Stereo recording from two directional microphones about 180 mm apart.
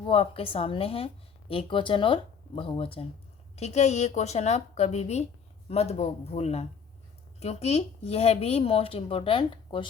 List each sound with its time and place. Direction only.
0.0 s a woman's voice: 30° left (ahead or behind)